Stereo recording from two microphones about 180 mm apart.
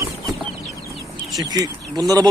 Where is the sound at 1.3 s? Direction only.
20° right (ahead or behind).